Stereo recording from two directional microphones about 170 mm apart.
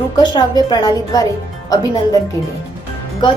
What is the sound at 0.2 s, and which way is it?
A woman's voice, 25° left (ahead or behind).